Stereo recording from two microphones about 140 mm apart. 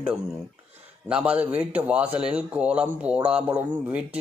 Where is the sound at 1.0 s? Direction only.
10° right (ahead or behind).